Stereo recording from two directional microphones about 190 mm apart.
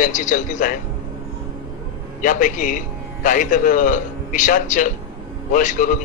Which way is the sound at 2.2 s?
40° left (ahead or behind).